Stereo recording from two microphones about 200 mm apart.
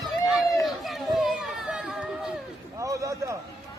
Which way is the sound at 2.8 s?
15° right (ahead or behind).